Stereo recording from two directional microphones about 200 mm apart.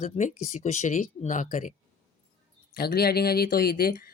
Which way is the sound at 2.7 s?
50° left (ahead or behind).